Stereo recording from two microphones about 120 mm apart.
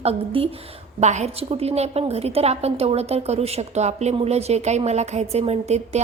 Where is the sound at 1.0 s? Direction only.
70° right (ahead or behind).